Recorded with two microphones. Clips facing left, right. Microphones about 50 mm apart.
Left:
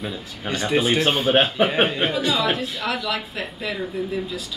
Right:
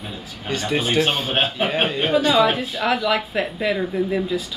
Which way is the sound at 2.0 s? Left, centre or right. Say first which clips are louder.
Right 5 dB; right.